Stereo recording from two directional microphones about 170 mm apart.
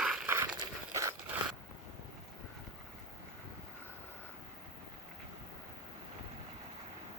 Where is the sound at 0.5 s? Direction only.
20° right (ahead or behind).